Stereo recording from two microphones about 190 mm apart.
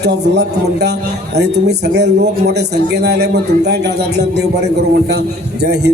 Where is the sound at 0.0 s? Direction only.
60° right (ahead or behind).